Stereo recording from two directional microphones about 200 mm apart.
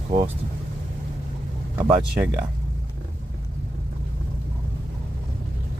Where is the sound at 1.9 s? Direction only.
5° right (ahead or behind).